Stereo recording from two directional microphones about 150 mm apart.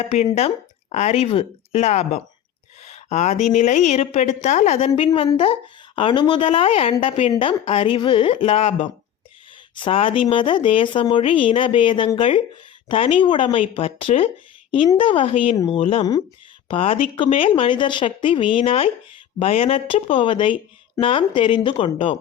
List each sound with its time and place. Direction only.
0.3 s a woman's voice: 45° left (ahead or behind)
15.5 s speech: 25° left (ahead or behind)
15.8 s a woman's voice: 45° left (ahead or behind)